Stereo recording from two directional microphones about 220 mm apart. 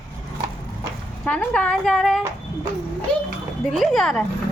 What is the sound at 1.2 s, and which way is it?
Speech, 5° left (ahead or behind).